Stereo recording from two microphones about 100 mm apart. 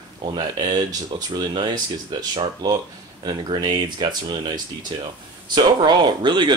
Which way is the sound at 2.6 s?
40° right (ahead or behind).